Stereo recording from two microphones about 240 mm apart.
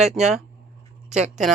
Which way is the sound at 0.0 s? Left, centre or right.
Centre.